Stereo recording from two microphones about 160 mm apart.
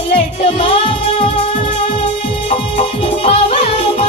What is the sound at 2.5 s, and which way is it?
Music, 40° left (ahead or behind).